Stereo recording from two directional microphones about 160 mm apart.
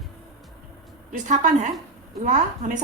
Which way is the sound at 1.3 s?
50° right (ahead or behind).